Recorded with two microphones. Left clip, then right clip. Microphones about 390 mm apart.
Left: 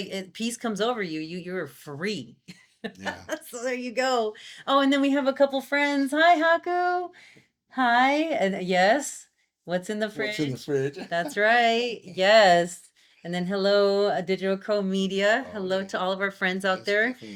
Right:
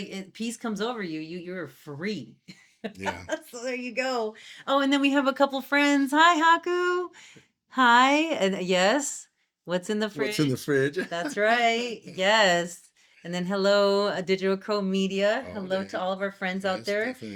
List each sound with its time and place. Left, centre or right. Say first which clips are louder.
0.0 s speech: left 4 dB; centre
10.3 s speech: right 2 dB; right
11.1 s speech: left 5 dB; centre